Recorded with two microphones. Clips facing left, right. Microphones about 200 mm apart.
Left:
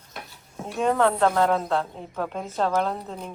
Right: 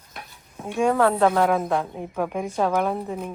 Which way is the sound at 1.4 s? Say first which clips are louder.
Right 1 dB; 15° right (ahead or behind).